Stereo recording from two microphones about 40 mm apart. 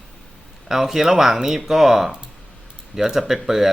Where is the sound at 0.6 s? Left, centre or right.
Centre.